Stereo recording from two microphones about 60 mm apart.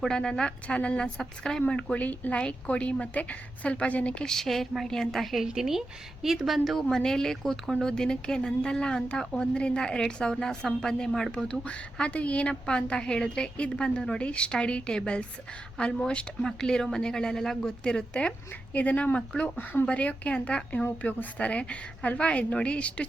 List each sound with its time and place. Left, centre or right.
0.0 s a woman's voice: centre
6.7 s a woman's voice: centre